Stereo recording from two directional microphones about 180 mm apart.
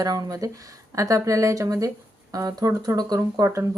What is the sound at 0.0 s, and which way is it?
Speech, 20° right (ahead or behind).